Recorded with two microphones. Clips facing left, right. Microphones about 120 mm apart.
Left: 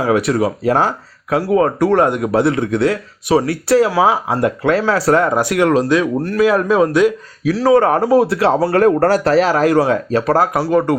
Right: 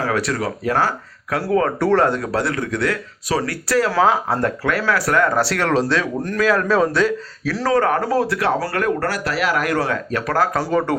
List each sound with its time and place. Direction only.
0.0 s speech: 20° left (ahead or behind)
3.9 s speech: 10° left (ahead or behind)
4.6 s speech: 25° left (ahead or behind)
5.3 s speech: 15° left (ahead or behind)
7.8 s speech: 30° left (ahead or behind)
8.7 s speech: 35° left (ahead or behind)
9.7 s speech: 20° left (ahead or behind)
10.5 s speech: 5° left (ahead or behind)